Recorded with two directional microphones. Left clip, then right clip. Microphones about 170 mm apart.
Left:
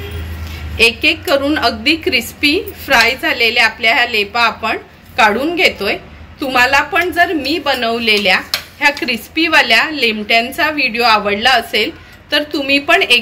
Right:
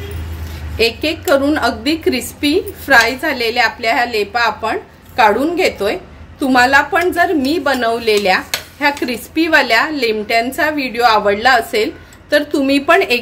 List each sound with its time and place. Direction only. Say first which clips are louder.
0.7 s a woman's voice: left 4 dB; 40° right (ahead or behind)